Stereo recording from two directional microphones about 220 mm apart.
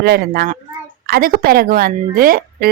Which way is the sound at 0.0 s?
45° right (ahead or behind).